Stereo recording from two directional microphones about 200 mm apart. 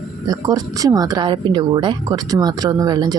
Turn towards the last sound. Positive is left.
turn(degrees=-20)  # may be behind; listen again after turning